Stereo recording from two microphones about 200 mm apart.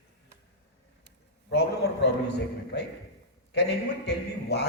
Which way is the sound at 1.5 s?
60° left (ahead or behind).